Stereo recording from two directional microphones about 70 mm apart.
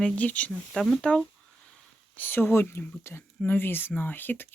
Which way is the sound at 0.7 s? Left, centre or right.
Centre.